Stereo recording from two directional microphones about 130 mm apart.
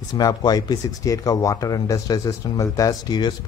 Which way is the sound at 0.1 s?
30° left (ahead or behind).